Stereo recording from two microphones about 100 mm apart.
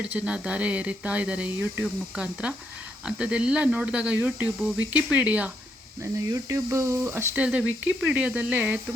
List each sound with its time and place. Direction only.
0.0 s speech: 10° right (ahead or behind)
1.8 s speech: 10° right (ahead or behind)
6.0 s speech: 30° right (ahead or behind)
7.4 s speech: 10° right (ahead or behind)